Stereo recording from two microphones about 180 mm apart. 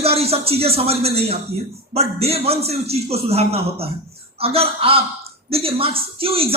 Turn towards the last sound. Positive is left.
turn(degrees=-30)  # may be behind; listen again after turning